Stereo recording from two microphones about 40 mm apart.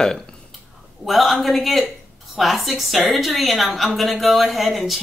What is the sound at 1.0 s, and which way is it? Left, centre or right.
A woman's voice, centre.